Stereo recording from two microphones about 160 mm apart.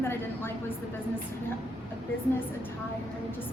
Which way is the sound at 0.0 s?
15° left (ahead or behind).